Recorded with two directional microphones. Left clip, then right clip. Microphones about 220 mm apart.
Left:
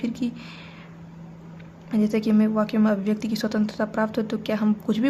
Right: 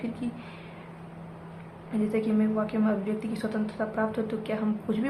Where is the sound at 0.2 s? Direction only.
50° left (ahead or behind).